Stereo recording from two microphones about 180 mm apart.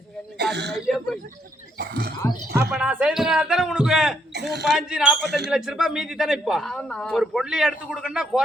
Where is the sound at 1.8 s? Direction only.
60° right (ahead or behind).